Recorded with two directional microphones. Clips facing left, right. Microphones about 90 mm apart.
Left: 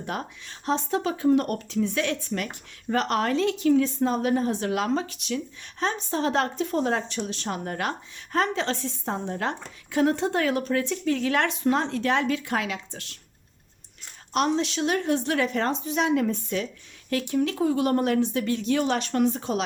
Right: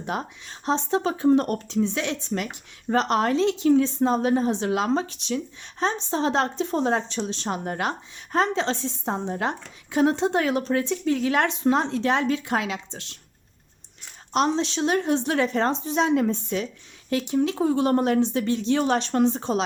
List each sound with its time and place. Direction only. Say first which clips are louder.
0.0 s speech: right 2 dB; 20° right (ahead or behind)
14.3 s speech: right 1 dB; 25° right (ahead or behind)